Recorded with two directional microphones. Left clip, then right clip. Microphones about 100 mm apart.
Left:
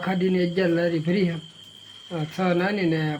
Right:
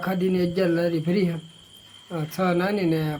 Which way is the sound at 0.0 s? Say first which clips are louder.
Even; 30° right (ahead or behind).